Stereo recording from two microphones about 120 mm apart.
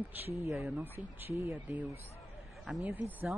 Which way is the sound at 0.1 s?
15° right (ahead or behind).